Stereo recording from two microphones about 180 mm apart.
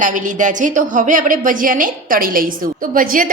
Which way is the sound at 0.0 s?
45° right (ahead or behind).